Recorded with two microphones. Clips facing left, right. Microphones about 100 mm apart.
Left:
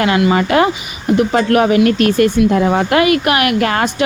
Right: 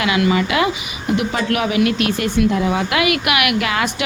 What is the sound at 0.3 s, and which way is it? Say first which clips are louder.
Speech: left 4 dB; 40° left (ahead or behind).